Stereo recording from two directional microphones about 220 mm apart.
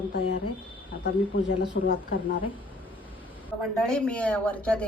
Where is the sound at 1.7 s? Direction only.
50° left (ahead or behind).